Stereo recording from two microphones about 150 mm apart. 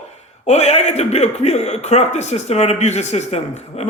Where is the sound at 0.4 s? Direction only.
45° left (ahead or behind).